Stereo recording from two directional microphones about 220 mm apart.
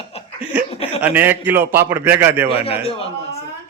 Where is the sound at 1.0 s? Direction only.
10° right (ahead or behind).